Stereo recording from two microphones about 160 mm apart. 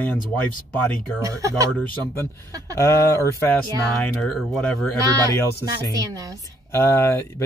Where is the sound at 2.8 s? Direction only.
15° left (ahead or behind).